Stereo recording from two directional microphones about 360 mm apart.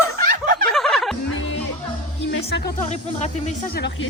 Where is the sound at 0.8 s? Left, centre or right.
Centre.